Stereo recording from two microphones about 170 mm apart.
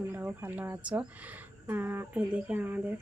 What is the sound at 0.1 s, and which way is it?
Speech, 10° right (ahead or behind).